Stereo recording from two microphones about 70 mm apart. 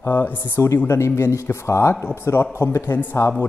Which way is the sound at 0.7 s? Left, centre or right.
Left.